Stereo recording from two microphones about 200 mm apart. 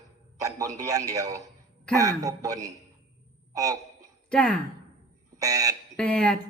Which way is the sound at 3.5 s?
15° right (ahead or behind).